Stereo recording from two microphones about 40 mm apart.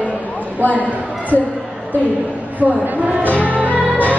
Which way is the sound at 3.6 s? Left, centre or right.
Right.